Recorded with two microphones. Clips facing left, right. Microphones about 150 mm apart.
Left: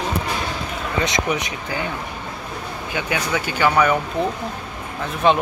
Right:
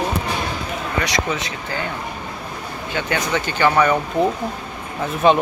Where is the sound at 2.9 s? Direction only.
10° left (ahead or behind).